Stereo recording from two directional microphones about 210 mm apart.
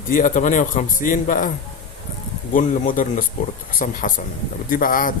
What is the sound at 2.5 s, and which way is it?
Speech, 40° left (ahead or behind).